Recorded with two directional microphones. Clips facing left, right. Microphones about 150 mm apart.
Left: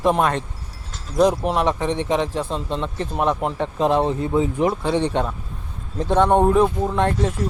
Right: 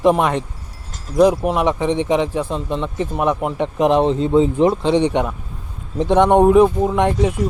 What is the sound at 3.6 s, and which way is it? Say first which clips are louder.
Speech: right 5 dB; 20° right (ahead or behind).